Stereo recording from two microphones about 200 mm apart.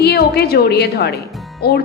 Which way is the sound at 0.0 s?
55° left (ahead or behind).